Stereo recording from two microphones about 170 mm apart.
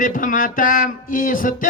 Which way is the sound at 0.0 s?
50° left (ahead or behind).